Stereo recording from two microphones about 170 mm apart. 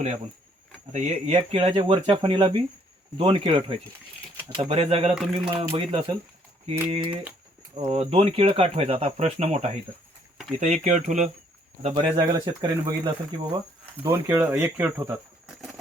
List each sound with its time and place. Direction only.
0.9 s speech: 40° right (ahead or behind)
5.1 s a sound: centre (ahead or behind)
5.7 s speech: 30° right (ahead or behind)
11.9 s speech: 25° right (ahead or behind); by 15.7 s 5° right (ahead or behind)